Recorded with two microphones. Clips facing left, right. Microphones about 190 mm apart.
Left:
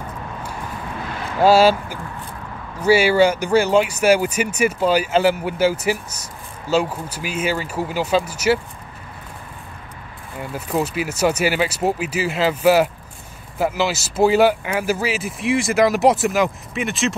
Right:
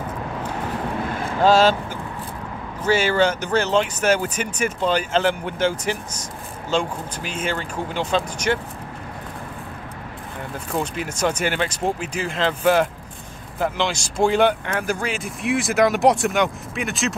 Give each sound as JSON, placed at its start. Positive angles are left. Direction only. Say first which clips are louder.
{"t": 1.4, "sound": "speech", "louder": "left 3 dB", "side_deg": 10}
{"t": 10.5, "sound": "speech", "louder": "left 4 dB", "side_deg": 5}